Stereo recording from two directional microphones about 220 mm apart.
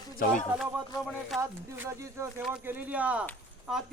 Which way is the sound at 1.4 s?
10° right (ahead or behind).